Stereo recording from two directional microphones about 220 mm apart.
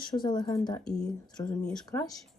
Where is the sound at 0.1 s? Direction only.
20° left (ahead or behind).